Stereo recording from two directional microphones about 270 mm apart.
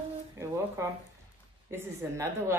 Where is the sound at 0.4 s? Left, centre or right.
Centre.